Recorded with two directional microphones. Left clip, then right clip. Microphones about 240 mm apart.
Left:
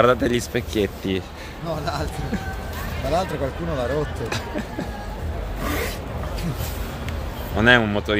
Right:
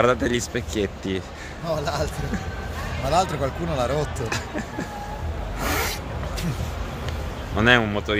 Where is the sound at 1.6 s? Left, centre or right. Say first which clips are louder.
Right 2 dB; right.